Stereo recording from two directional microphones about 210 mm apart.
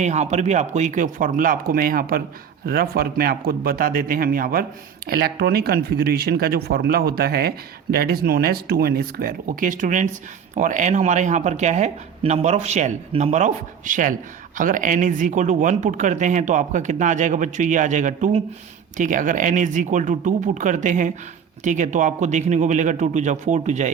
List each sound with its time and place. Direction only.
0.0 s speech: 35° right (ahead or behind)